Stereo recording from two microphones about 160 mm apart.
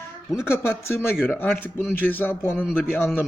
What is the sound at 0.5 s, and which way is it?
Speech, 15° left (ahead or behind).